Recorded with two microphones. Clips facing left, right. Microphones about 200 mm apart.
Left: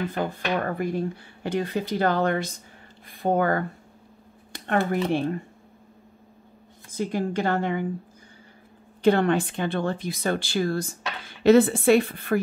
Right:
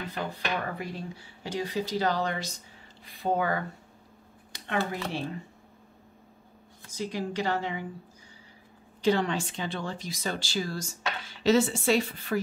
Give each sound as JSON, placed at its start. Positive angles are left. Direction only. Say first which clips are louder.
{"t": 0.1, "sound": "speech", "louder": "left 6 dB", "side_deg": 50}
{"t": 4.5, "sound": "a sound", "louder": "left 6 dB", "side_deg": 55}
{"t": 6.9, "sound": "speech", "louder": "left 6 dB", "side_deg": 55}
{"t": 9.0, "sound": "speech", "louder": "left 6 dB", "side_deg": 55}